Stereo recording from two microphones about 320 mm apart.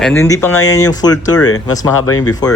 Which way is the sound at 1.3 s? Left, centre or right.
Left.